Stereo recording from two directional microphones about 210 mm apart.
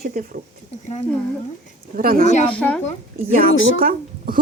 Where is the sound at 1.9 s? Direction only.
45° right (ahead or behind).